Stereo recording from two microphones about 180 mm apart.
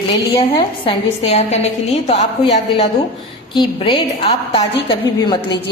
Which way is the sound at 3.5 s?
25° left (ahead or behind).